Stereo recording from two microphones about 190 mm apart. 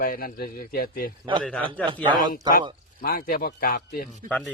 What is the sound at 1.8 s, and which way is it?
Speech, 25° right (ahead or behind).